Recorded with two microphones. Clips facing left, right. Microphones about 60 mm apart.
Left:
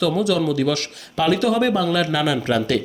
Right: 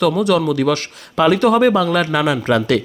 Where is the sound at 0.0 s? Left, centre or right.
Right.